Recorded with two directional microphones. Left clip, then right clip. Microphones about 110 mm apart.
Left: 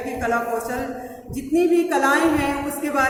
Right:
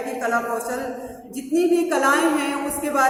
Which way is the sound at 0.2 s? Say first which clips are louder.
Left 1 dB; 10° left (ahead or behind).